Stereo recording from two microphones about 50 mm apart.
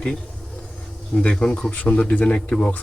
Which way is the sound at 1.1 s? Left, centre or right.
Centre.